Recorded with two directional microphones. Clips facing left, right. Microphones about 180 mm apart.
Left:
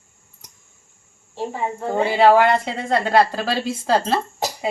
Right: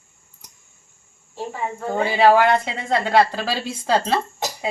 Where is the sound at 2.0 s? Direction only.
Centre (ahead or behind).